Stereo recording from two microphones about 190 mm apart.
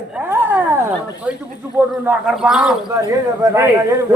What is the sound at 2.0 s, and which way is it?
Speech, 10° right (ahead or behind).